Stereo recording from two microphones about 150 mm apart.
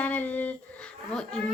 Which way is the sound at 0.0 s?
10° left (ahead or behind).